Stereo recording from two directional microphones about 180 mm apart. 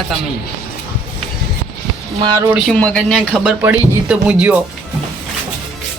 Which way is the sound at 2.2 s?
20° right (ahead or behind).